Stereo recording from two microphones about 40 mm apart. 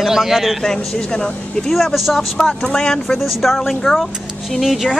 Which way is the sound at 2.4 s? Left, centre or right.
Centre.